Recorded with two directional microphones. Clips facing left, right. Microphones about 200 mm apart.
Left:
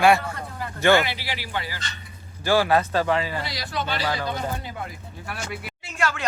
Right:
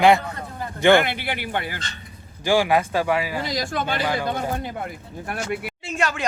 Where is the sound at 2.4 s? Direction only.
15° right (ahead or behind).